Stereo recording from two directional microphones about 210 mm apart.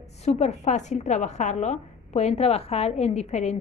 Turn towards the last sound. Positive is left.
turn(degrees=35)  # may be behind; listen again after turning